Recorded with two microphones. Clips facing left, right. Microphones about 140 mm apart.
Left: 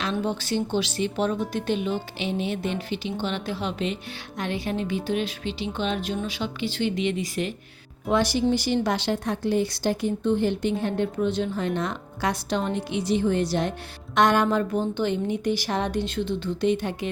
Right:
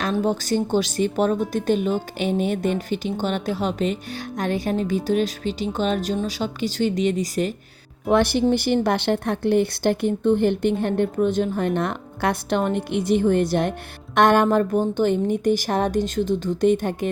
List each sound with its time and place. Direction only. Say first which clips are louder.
0.0 s a woman's voice: right 5 dB; 40° right (ahead or behind)
8.1 s a woman's voice: right 4 dB; 55° right (ahead or behind)